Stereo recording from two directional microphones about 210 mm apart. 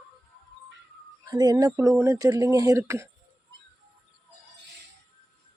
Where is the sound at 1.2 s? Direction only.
20° right (ahead or behind).